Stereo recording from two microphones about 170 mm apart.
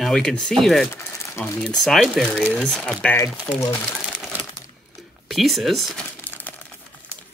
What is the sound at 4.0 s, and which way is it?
Crumpling, 5° right (ahead or behind).